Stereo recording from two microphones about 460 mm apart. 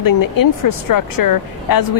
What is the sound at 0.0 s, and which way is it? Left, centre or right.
Speech, left.